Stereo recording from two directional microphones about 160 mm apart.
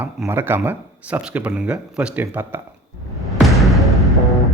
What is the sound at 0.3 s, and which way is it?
Speech, 15° right (ahead or behind).